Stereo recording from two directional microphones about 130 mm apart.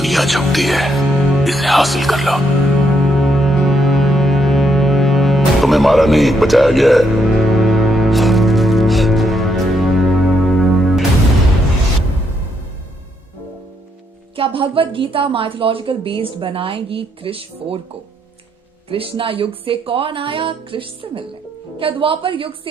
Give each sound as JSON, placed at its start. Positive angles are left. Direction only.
{"t": 0.0, "sound": "speech", "side_deg": 0}
{"t": 3.0, "sound": "music", "side_deg": 0}
{"t": 14.3, "sound": "speech", "side_deg": -45}
{"t": 18.9, "sound": "speech", "side_deg": -45}